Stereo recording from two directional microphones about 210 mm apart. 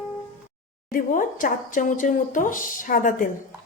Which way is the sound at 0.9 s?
40° left (ahead or behind).